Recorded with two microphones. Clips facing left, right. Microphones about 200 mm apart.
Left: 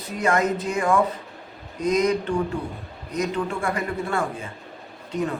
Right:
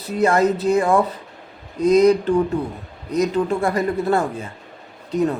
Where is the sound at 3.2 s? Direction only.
35° right (ahead or behind).